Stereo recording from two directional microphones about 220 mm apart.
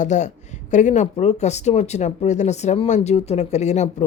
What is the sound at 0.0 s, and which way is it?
A woman's voice, 35° left (ahead or behind).